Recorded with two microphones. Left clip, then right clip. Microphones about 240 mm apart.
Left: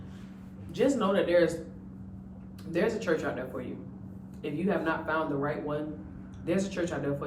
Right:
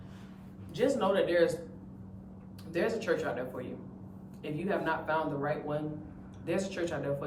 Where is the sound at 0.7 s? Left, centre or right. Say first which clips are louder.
Left 2 dB; centre.